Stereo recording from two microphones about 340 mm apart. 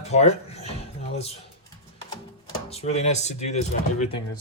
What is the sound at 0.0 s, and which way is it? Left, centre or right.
Music, centre.